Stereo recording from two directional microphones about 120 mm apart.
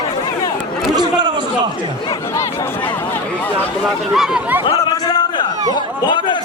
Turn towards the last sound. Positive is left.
turn(degrees=40)  # may be behind; listen again after turning